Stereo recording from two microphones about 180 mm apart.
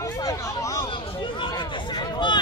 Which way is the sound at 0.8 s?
30° left (ahead or behind).